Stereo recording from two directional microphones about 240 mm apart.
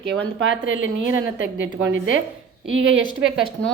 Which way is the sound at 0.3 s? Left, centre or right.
Right.